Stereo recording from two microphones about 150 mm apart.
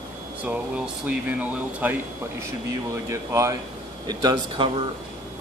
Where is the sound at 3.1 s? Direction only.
20° right (ahead or behind).